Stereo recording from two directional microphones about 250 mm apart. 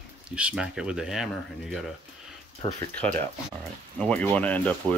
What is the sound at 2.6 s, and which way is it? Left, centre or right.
Speech, left.